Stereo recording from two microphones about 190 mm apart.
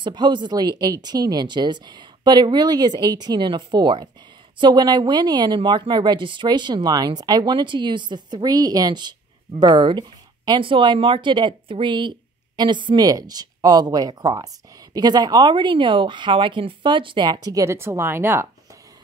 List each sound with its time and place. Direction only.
0.0 s speech: 25° right (ahead or behind)